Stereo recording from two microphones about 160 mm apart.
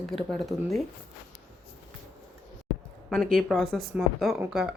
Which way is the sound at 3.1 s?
5° left (ahead or behind).